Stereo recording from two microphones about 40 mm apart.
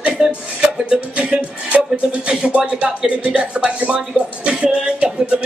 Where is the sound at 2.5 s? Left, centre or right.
Right.